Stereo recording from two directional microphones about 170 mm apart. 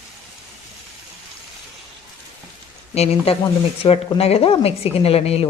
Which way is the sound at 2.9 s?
35° left (ahead or behind).